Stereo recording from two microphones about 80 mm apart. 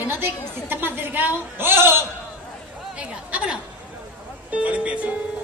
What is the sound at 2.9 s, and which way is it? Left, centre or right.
A woman's voice, centre.